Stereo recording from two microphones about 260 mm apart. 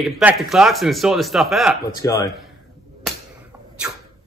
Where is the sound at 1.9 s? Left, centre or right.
Centre.